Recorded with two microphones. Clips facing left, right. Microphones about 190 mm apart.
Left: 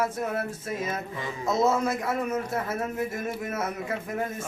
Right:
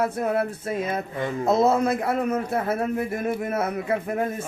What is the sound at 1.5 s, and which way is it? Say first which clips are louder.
A man's voice: right 4 dB; 60° right (ahead or behind).